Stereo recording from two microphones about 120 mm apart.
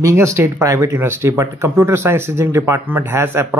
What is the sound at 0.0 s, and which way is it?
Speech, 25° right (ahead or behind).